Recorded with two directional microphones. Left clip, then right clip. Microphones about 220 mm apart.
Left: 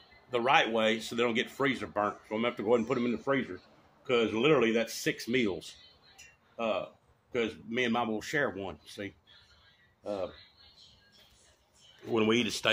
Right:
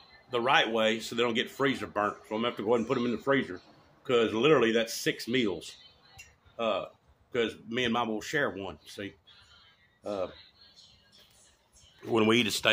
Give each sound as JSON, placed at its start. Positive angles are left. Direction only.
{"t": 0.3, "sound": "speech", "side_deg": 0}
{"t": 12.0, "sound": "speech", "side_deg": -20}